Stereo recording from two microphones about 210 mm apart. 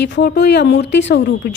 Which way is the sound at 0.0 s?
50° left (ahead or behind).